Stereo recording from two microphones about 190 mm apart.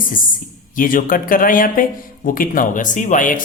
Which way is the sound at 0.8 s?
45° left (ahead or behind).